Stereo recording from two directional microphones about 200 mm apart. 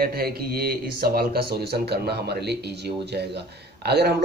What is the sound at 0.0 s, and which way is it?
Speech, 50° right (ahead or behind).